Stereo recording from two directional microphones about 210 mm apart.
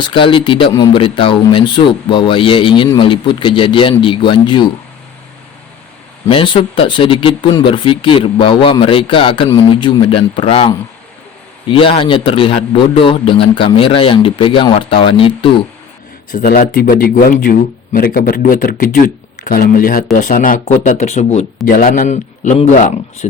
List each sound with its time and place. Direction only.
0.0 s speech: 25° left (ahead or behind)
6.2 s speech: 25° left (ahead or behind)
16.3 s speech: 45° left (ahead or behind)